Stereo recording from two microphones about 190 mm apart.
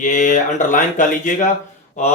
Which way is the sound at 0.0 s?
40° left (ahead or behind).